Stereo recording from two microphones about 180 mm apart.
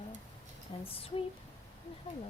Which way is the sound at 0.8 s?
30° left (ahead or behind).